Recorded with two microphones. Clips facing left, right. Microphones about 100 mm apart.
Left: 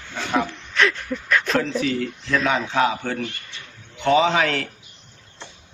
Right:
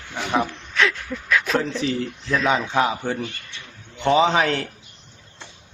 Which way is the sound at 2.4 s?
15° right (ahead or behind).